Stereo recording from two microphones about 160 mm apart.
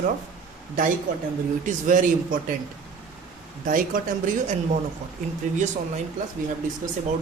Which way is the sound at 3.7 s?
55° right (ahead or behind).